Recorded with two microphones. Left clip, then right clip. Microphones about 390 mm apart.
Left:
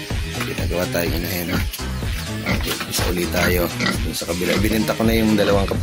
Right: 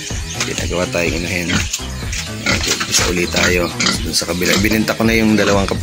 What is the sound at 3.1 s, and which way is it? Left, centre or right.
Speech, left.